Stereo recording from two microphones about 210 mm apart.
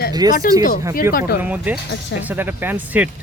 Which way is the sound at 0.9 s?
45° left (ahead or behind).